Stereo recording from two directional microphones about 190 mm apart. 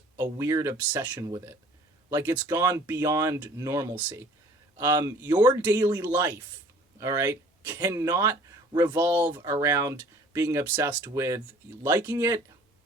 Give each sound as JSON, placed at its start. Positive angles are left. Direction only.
{"t": 0.2, "sound": "speech", "side_deg": -15}